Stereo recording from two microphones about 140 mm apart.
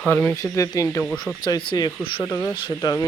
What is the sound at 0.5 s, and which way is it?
Speech, 25° left (ahead or behind).